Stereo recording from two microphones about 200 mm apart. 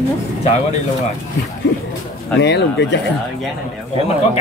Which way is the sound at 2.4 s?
60° left (ahead or behind).